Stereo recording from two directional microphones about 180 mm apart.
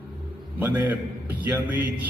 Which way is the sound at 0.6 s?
10° right (ahead or behind).